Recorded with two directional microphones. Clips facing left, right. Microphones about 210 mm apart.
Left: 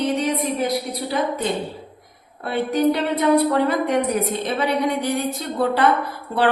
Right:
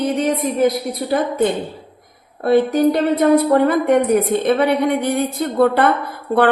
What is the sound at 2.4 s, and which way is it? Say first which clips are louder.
A woman's voice: right 6 dB; 45° right (ahead or behind).